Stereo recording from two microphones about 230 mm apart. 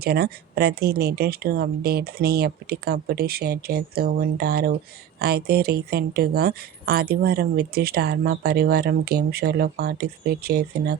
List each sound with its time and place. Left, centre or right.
0.0 s speech: right